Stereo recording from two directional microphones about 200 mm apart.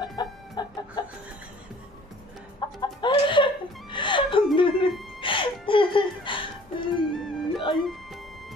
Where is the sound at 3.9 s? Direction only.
25° left (ahead or behind).